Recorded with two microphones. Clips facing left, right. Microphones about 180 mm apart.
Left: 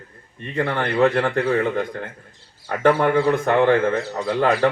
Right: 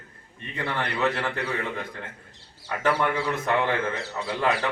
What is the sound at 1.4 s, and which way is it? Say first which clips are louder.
A man's voice: left 10 dB; 45° left (ahead or behind).